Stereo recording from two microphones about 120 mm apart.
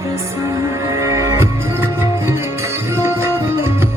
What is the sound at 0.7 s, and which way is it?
Music, 25° right (ahead or behind).